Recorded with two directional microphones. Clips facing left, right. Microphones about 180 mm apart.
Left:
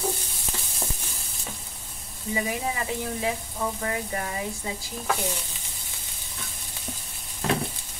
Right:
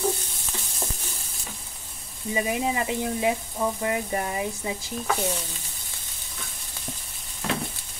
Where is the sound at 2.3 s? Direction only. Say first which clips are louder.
Right 3 dB; 20° right (ahead or behind).